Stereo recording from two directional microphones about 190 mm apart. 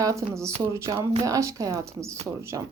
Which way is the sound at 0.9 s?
30° right (ahead or behind).